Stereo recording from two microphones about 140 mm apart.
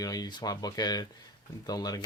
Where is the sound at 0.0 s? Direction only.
30° left (ahead or behind).